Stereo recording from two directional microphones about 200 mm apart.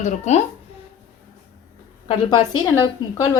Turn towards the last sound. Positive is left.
turn(degrees=20)  # may be behind; listen again after turning